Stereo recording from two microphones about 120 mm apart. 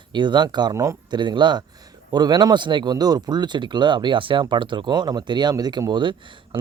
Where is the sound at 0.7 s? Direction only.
25° right (ahead or behind).